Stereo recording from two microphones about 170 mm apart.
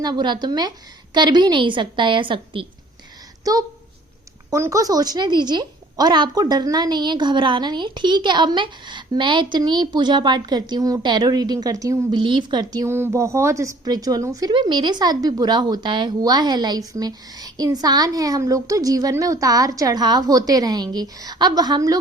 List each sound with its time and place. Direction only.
0.0 s a woman's voice: 25° right (ahead or behind)